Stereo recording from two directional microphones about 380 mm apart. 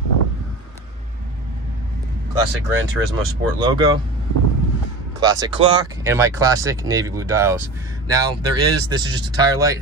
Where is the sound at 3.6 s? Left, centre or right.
Centre.